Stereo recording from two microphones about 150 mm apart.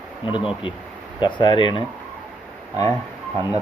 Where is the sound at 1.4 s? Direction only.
35° left (ahead or behind).